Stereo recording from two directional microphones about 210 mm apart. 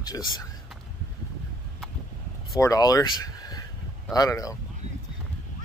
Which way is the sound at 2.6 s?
15° left (ahead or behind).